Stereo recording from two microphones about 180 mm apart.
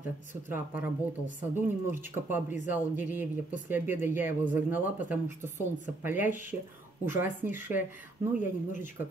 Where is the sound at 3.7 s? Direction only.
10° right (ahead or behind).